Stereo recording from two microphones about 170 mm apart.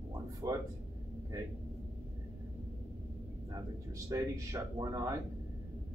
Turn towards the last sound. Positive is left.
turn(degrees=-20)  # may be behind; listen again after turning